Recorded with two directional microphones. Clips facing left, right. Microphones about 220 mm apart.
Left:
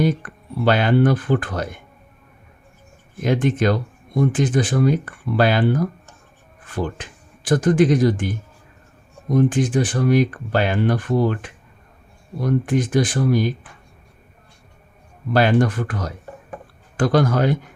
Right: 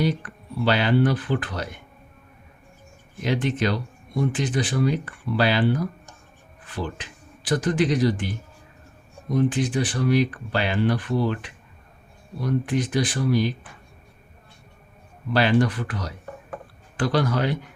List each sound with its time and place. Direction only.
0.0 s speech: 50° left (ahead or behind)
3.2 s speech: 50° left (ahead or behind)
15.3 s speech: 50° left (ahead or behind)